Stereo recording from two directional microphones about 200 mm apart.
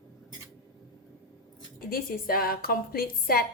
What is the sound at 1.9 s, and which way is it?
A woman's voice, 50° left (ahead or behind).